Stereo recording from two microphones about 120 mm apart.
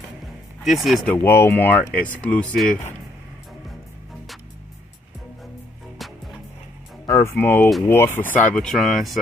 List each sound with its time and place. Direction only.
0.7 s speech: centre (ahead or behind)
1.0 s speech: 15° left (ahead or behind)
7.1 s speech: 25° left (ahead or behind)
8.5 s speech: centre (ahead or behind)